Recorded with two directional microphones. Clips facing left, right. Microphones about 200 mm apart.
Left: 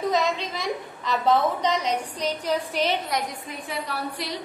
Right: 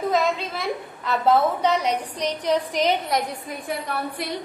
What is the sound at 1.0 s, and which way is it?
Speech, 5° right (ahead or behind).